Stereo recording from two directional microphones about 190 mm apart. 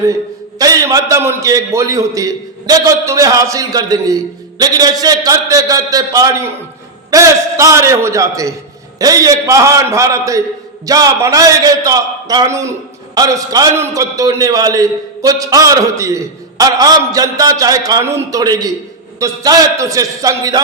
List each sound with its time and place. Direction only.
0.6 s a man's voice: 20° right (ahead or behind)